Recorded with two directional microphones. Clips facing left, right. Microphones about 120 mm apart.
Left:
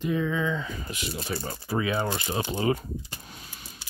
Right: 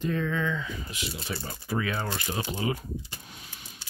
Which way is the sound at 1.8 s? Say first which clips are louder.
Left 7 dB; 20° left (ahead or behind).